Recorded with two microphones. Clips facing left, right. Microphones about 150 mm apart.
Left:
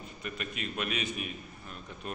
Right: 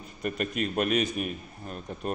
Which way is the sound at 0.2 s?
45° right (ahead or behind).